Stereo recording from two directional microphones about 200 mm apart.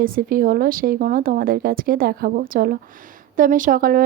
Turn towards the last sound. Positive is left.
turn(degrees=-45)  # may be behind; listen again after turning